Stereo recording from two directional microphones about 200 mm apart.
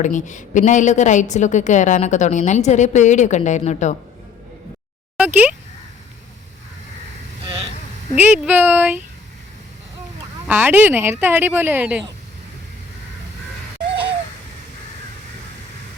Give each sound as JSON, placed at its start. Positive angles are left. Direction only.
{"t": 0.0, "sound": "a woman's voice", "side_deg": 40}
{"t": 5.1, "sound": "speech", "side_deg": -10}
{"t": 8.1, "sound": "a woman's voice", "side_deg": -10}
{"t": 10.5, "sound": "a woman's voice", "side_deg": -10}